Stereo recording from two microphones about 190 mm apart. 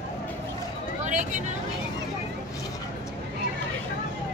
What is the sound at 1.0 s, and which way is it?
Speech, 40° right (ahead or behind).